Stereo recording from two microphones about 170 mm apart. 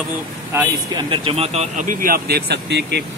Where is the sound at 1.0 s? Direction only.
35° right (ahead or behind).